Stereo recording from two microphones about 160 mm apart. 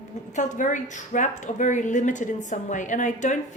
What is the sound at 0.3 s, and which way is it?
A woman's voice, 50° left (ahead or behind).